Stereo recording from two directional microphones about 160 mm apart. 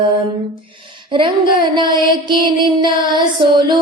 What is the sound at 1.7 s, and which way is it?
Music, 30° right (ahead or behind).